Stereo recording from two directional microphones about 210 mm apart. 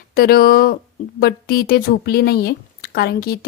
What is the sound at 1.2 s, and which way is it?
A woman's voice, 45° left (ahead or behind).